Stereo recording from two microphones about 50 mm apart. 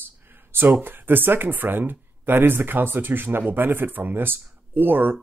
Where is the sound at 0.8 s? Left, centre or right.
Right.